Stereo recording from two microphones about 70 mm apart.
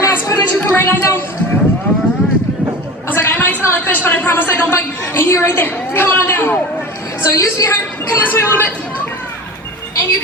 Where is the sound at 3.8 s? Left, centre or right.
Left.